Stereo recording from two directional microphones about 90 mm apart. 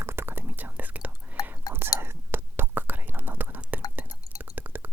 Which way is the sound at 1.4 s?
45° left (ahead or behind).